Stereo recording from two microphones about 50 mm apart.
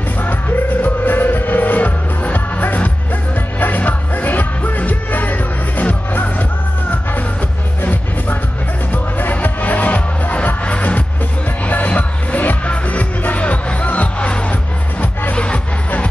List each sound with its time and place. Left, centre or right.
0.2 s music: left
7.8 s music: left
15.3 s music: left